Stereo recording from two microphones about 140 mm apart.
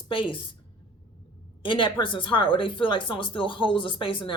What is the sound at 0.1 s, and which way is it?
Speech, 40° left (ahead or behind).